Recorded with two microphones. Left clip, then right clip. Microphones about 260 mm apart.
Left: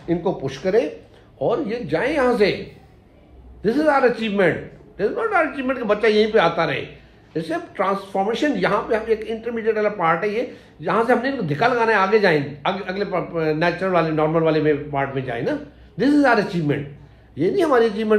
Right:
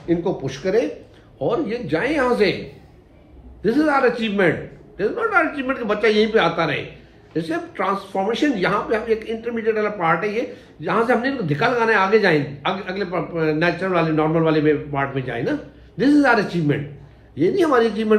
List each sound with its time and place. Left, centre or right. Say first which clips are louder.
0.0 s speech: right 1 dB; left
3.6 s speech: even; left